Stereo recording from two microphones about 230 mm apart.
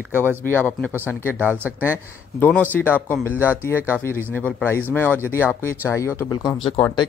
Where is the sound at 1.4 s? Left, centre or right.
Centre.